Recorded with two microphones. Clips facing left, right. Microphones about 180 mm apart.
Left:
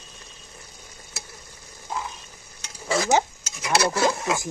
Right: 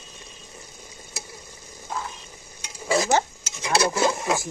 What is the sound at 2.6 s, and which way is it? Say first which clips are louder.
Stir: right 2 dB; 20° right (ahead or behind).